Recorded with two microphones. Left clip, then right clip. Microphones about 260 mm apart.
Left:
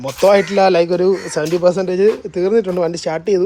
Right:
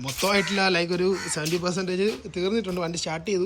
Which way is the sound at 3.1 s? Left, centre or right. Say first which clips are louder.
Left 11 dB; left.